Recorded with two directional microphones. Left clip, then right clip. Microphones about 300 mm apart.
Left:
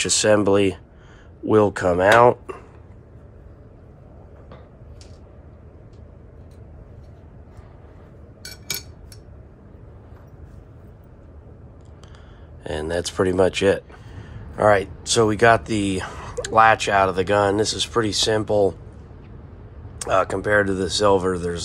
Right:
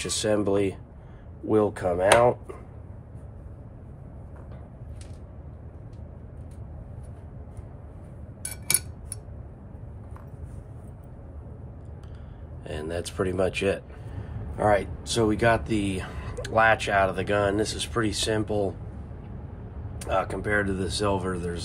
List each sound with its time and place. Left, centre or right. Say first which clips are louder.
0.0 s speech: left 8 dB; left
12.6 s speech: left 7 dB; left
20.0 s speech: left 7 dB; left